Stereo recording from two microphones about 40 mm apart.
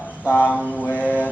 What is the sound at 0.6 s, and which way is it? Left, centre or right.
Mantra, left.